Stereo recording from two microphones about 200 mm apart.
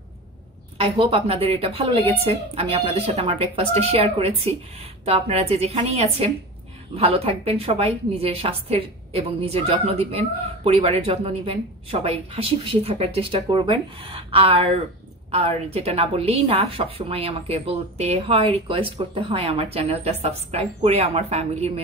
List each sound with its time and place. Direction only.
0.7 s a woman's voice: 30° right (ahead or behind)